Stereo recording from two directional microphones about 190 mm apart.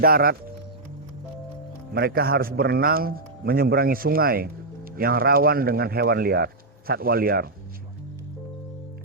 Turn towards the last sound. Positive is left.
turn(degrees=-50)  # may be behind; listen again after turning